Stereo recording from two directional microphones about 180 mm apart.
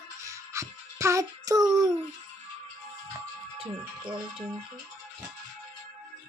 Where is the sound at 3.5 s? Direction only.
30° right (ahead or behind).